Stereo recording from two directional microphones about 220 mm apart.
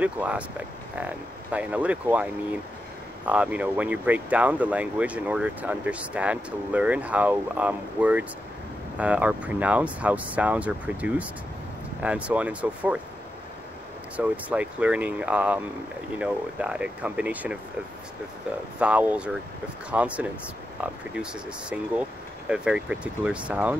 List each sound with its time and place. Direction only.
0.0 s speech: 5° right (ahead or behind)
14.1 s speech: 5° right (ahead or behind)
18.8 s speech: 5° right (ahead or behind)